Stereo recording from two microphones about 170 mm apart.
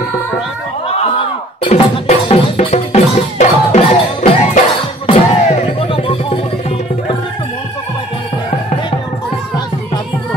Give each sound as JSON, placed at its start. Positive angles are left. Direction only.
{"t": 1.6, "sound": "music", "side_deg": 35}